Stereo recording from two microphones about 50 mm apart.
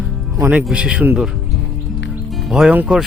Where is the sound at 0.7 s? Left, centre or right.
Right.